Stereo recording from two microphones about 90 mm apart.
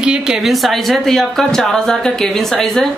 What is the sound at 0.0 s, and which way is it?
Speech, 5° right (ahead or behind).